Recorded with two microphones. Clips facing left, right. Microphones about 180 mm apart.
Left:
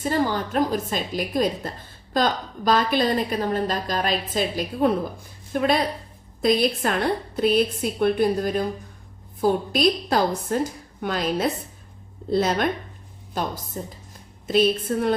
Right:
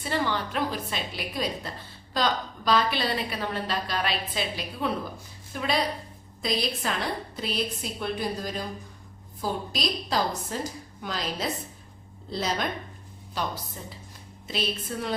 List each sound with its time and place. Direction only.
0.0 s a woman's voice: 40° left (ahead or behind)